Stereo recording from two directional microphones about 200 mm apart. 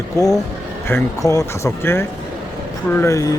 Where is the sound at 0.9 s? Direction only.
15° left (ahead or behind).